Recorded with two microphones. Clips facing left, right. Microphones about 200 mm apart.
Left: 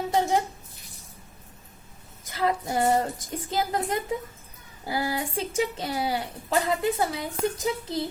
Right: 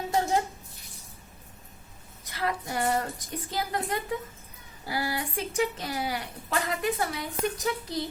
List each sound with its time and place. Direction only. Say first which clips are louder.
0.1 s a sound: left 2 dB; 20° left (ahead or behind)
2.3 s speech: left 5 dB; 25° left (ahead or behind)
4.9 s speech: left 3 dB; 20° left (ahead or behind)